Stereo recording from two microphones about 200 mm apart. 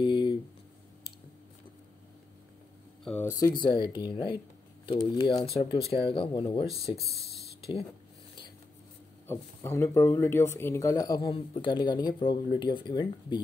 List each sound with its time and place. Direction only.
0.0 s a sound: 25° left (ahead or behind)
3.0 s music: 5° left (ahead or behind)
3.3 s speech: 20° left (ahead or behind)
9.3 s speech: 15° left (ahead or behind)